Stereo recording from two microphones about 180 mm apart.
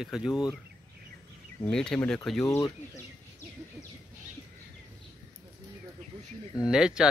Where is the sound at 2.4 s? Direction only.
20° left (ahead or behind).